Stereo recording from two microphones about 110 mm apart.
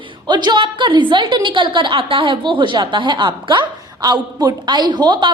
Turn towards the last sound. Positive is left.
turn(degrees=-40)  # may be behind; listen again after turning